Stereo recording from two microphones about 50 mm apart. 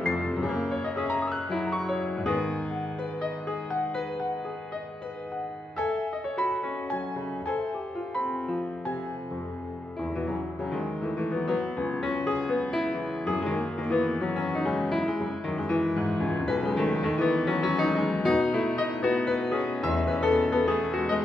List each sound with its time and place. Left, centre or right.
0.3 s music: centre
0.9 s music: centre
1.9 s music: centre
5.9 s music: centre
11.1 s music: centre
12.2 s music: left
12.4 s music: centre